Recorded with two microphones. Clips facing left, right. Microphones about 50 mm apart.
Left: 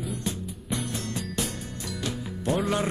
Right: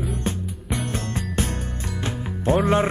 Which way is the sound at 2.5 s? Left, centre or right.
Right.